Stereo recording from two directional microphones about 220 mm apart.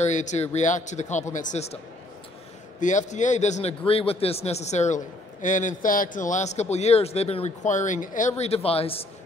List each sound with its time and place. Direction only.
0.0 s a man's voice: 35° left (ahead or behind)
2.8 s a man's voice: 35° left (ahead or behind)